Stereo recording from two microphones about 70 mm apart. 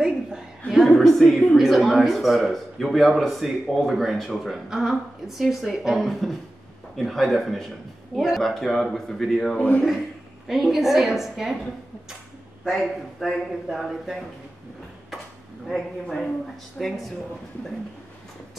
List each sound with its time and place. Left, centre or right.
0.7 s a sound: centre
1.6 s a woman's voice: centre
9.6 s a man's voice: centre
10.5 s speech: centre
12.7 s speech: centre
15.7 s speech: centre